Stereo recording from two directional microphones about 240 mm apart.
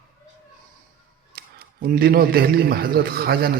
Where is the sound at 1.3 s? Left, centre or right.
Right.